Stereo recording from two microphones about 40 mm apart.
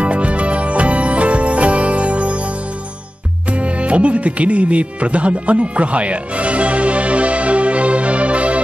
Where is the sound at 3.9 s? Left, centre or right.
Right.